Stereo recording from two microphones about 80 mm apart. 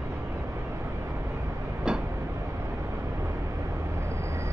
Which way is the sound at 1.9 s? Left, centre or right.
Centre.